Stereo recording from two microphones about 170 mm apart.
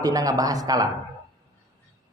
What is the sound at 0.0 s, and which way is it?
Speech, 20° right (ahead or behind).